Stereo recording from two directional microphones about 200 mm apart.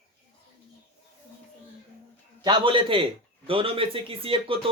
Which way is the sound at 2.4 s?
25° right (ahead or behind).